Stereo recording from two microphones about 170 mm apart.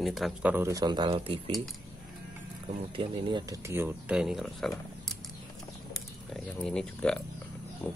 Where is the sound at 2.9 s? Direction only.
30° right (ahead or behind).